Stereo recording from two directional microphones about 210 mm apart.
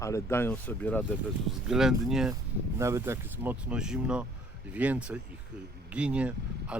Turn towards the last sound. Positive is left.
turn(degrees=-5)  # may be behind; listen again after turning